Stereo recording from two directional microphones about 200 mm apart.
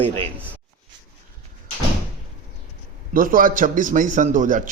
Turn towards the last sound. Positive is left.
turn(degrees=-40)  # may be behind; listen again after turning